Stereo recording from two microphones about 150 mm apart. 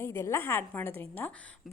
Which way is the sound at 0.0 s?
15° left (ahead or behind).